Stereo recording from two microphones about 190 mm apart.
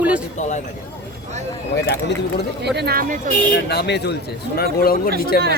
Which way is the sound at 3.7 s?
60° left (ahead or behind).